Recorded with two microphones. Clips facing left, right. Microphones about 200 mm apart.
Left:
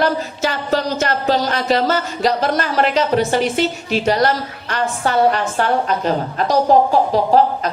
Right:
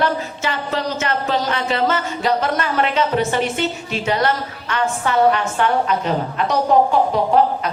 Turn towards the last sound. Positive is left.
turn(degrees=35)  # may be behind; listen again after turning